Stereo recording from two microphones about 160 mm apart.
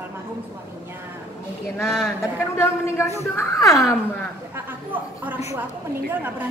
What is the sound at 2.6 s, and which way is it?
Speech, 15° left (ahead or behind).